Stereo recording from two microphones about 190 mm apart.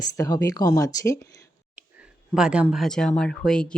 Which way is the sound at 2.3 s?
5° right (ahead or behind).